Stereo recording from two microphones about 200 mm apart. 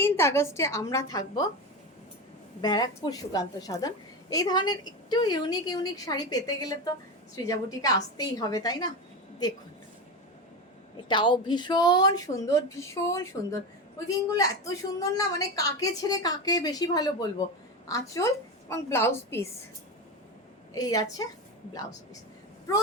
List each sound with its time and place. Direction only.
0.0 s a woman's voice: 15° left (ahead or behind)
2.6 s a woman's voice: 20° left (ahead or behind)
11.1 s a woman's voice: 25° left (ahead or behind)
20.7 s a woman's voice: 20° left (ahead or behind)